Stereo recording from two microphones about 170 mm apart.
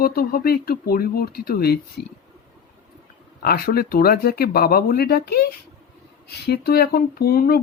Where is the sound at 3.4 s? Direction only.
65° left (ahead or behind).